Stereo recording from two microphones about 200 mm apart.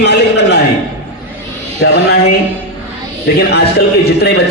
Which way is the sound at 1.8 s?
55° left (ahead or behind).